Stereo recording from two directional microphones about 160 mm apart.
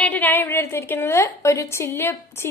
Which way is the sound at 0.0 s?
10° left (ahead or behind).